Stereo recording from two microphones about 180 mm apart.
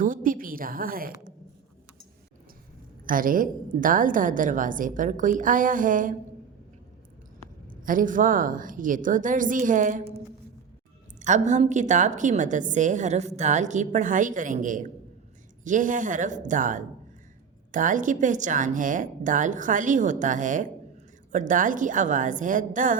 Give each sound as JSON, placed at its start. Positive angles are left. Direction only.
{"t": 0.0, "sound": "a woman's voice", "side_deg": -50}
{"t": 3.1, "sound": "a woman's voice", "side_deg": -50}
{"t": 7.7, "sound": "a woman's voice", "side_deg": -50}
{"t": 11.2, "sound": "a woman's voice", "side_deg": -40}